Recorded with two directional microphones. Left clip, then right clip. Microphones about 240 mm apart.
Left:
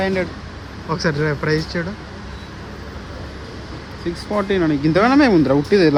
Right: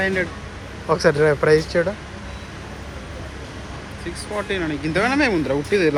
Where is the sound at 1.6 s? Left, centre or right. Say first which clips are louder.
Right 5 dB; centre.